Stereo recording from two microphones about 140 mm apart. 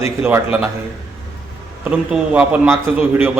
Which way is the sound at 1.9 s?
10° right (ahead or behind).